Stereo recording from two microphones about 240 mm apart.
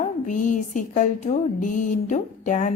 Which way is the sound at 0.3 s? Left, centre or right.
Left.